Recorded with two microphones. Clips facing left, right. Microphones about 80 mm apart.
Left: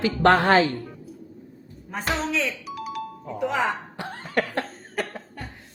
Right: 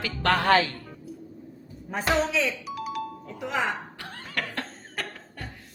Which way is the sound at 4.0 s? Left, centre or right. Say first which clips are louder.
Left 8 dB; left.